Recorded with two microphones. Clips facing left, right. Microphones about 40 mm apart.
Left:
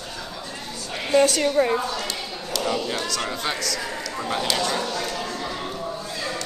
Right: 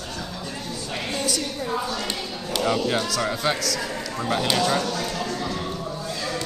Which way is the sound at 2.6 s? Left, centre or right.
Centre.